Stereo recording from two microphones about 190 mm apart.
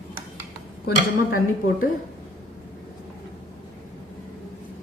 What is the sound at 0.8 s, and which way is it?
Speech, 80° left.